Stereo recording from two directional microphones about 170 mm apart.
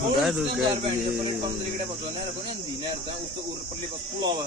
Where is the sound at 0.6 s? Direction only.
30° right (ahead or behind).